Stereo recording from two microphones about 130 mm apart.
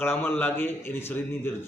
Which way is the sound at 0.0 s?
15° left (ahead or behind).